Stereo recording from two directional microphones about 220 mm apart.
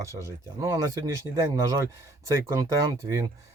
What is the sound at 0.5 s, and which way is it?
Speech, 15° right (ahead or behind).